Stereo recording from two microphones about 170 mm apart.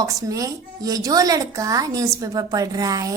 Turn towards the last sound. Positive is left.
turn(degrees=-20)  # may be behind; listen again after turning